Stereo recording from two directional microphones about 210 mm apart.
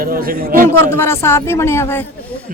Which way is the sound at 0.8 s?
10° left (ahead or behind).